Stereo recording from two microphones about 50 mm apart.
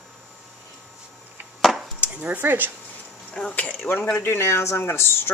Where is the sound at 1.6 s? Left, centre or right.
Centre.